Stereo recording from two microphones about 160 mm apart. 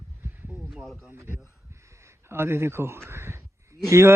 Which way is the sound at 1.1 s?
15° right (ahead or behind).